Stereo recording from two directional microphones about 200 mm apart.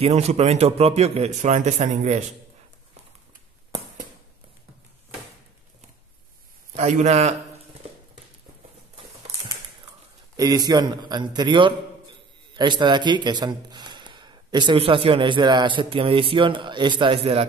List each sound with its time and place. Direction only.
0.0 s speech: 30° right (ahead or behind)
6.8 s speech: 35° right (ahead or behind)
10.3 s a man's voice: 20° right (ahead or behind)